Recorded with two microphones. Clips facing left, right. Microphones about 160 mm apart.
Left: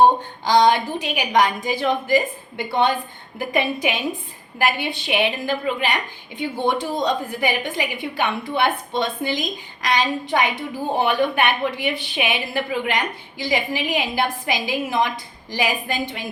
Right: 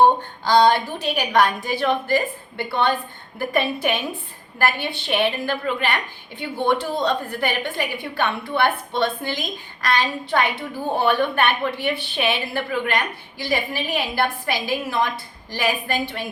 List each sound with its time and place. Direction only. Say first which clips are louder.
0.0 s a woman's voice: left 1 dB; 15° left (ahead or behind)